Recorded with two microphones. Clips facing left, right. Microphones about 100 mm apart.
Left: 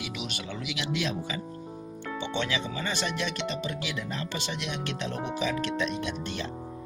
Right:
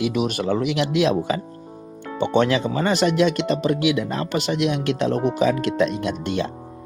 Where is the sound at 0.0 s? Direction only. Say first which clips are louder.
Right 15 dB; 45° right (ahead or behind).